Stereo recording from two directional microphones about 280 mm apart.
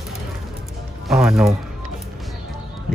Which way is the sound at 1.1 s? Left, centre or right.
Centre.